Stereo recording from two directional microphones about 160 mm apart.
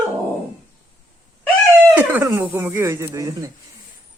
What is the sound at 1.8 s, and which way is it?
Speech, 10° right (ahead or behind).